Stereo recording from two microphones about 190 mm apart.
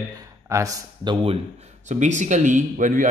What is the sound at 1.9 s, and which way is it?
A man's voice, 40° right (ahead or behind).